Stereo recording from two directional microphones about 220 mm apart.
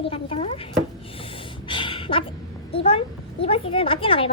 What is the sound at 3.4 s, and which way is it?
Speech, 25° left (ahead or behind).